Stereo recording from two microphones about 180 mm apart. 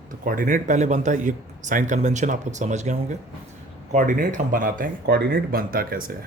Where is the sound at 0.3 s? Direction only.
45° right (ahead or behind).